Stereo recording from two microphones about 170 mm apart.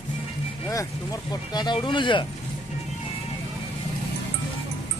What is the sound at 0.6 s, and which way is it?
Speech, 20° left (ahead or behind).